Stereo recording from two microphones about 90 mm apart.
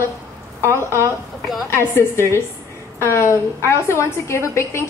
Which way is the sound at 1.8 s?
30° left (ahead or behind).